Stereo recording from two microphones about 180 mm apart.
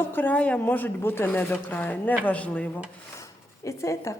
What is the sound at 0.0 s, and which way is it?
A woman's voice, 10° left (ahead or behind).